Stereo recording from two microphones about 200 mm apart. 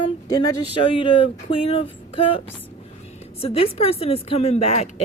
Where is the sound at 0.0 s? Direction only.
20° left (ahead or behind).